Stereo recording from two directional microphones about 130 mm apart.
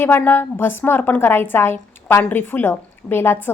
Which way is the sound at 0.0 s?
15° left (ahead or behind).